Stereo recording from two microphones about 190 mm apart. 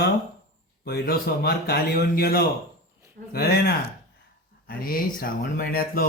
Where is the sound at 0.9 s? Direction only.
55° left (ahead or behind).